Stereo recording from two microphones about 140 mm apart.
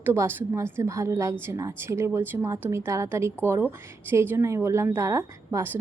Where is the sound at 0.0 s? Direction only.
15° right (ahead or behind).